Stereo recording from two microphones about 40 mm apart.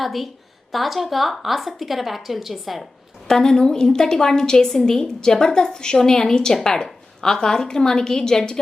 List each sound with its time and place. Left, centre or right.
0.0 s a woman's voice: centre
3.2 s a woman's voice: centre